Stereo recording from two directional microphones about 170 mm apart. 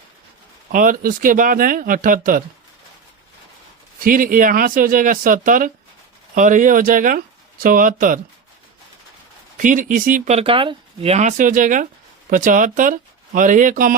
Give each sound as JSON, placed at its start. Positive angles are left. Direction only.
{"t": 0.7, "sound": "speech", "side_deg": -55}
{"t": 4.0, "sound": "speech", "side_deg": -55}
{"t": 9.6, "sound": "speech", "side_deg": -50}